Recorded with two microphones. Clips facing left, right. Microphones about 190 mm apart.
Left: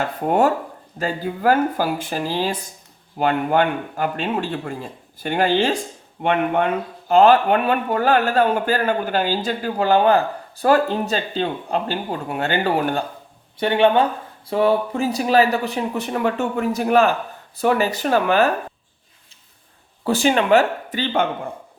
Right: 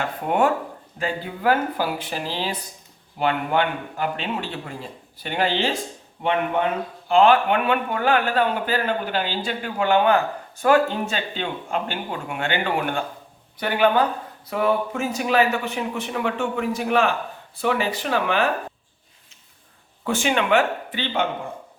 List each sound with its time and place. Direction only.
0.3 s a man's voice: 40° left (ahead or behind)
7.1 s speech: 40° left (ahead or behind)
13.6 s speech: 25° left (ahead or behind); by 18.4 s 40° left (ahead or behind)
20.1 s speech: 35° left (ahead or behind)